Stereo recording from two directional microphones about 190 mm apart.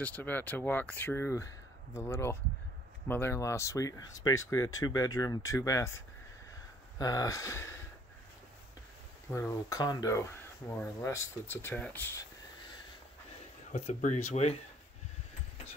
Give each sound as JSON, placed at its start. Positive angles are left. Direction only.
{"t": 0.0, "sound": "speech", "side_deg": 10}
{"t": 7.0, "sound": "speech", "side_deg": 20}
{"t": 9.3, "sound": "speech", "side_deg": 15}
{"t": 13.7, "sound": "speech", "side_deg": 40}